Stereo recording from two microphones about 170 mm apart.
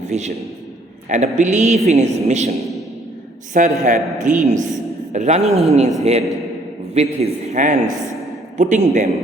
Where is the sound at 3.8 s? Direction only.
50° right (ahead or behind).